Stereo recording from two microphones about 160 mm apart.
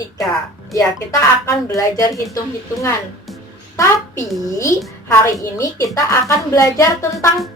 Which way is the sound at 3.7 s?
20° left (ahead or behind).